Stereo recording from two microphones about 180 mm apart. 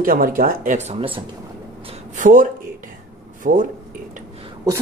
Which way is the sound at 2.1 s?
45° right (ahead or behind).